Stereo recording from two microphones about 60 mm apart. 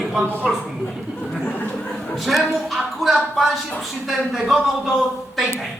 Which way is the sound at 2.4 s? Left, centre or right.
Centre.